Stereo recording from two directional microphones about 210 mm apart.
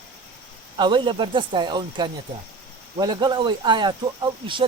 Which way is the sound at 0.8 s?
20° right (ahead or behind).